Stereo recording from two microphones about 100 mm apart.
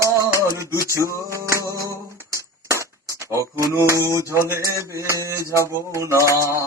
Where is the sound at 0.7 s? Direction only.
30° left (ahead or behind).